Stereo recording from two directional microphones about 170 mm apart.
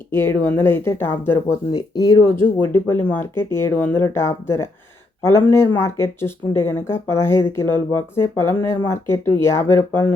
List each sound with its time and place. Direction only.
0.1 s speech: 15° left (ahead or behind)